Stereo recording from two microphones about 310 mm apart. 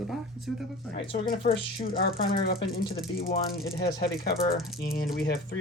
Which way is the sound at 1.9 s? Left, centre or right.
Left.